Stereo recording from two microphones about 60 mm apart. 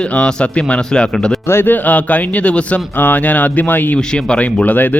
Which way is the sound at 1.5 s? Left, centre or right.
Left.